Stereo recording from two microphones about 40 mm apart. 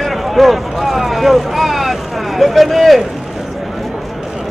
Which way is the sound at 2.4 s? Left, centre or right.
Centre.